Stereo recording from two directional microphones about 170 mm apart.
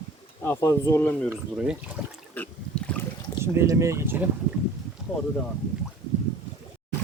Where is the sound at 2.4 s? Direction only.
10° left (ahead or behind).